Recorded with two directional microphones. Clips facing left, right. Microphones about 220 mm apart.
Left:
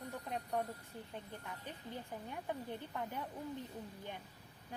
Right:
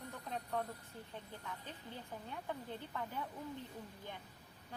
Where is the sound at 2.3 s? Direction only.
15° left (ahead or behind).